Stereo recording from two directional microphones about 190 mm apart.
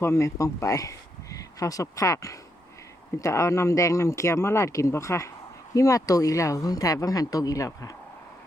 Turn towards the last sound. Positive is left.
turn(degrees=15)  # may be behind; listen again after turning